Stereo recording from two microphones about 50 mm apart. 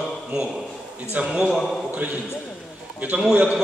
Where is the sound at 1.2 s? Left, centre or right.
Centre.